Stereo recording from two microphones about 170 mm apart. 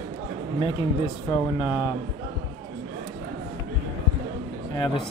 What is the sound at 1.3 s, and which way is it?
Speech, 25° left (ahead or behind).